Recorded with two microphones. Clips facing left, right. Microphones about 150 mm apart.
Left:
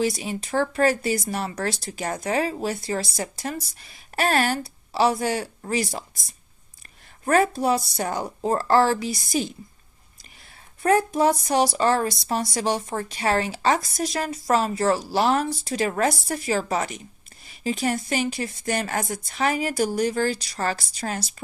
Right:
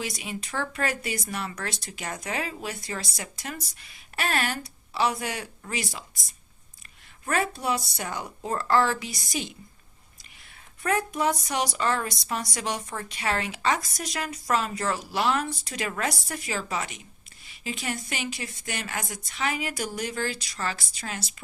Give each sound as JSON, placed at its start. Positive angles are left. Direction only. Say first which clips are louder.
{"t": 0.0, "sound": "speech", "louder": "left 9 dB", "side_deg": 35}
{"t": 7.3, "sound": "speech", "louder": "left 7 dB", "side_deg": 40}
{"t": 10.8, "sound": "speech", "louder": "left 6 dB", "side_deg": 35}